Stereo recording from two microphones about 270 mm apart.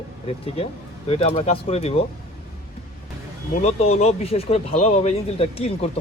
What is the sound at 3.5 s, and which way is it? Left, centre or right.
Speech, left.